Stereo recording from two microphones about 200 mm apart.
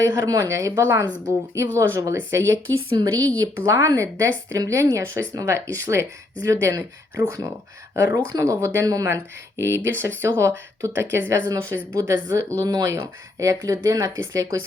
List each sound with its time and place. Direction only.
0.0 s speech: 15° right (ahead or behind)